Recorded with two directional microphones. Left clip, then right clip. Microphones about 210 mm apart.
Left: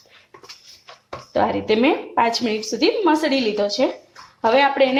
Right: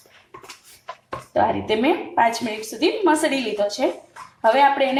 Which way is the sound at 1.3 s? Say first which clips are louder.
Left 1 dB; 40° left (ahead or behind).